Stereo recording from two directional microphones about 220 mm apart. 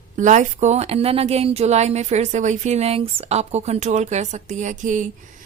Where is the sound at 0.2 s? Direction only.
35° right (ahead or behind).